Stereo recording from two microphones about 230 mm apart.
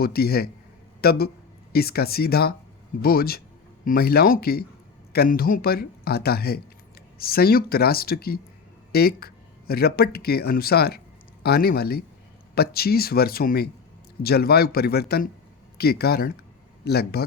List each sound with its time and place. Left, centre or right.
0.0 s speech: left